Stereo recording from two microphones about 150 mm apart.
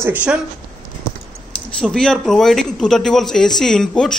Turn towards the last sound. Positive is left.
turn(degrees=5)  # may be behind; listen again after turning